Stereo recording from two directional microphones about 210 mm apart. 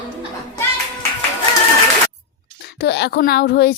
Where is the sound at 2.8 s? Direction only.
50° left (ahead or behind).